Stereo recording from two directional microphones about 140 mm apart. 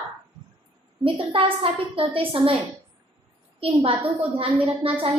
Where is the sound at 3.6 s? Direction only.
40° right (ahead or behind).